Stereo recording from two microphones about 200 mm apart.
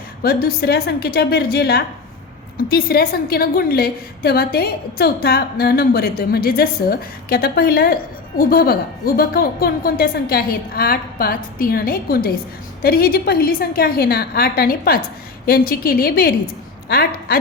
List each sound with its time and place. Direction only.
0.2 s a woman's voice: 50° left (ahead or behind)